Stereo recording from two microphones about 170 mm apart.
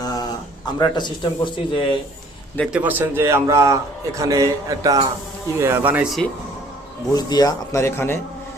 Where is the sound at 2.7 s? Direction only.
10° right (ahead or behind).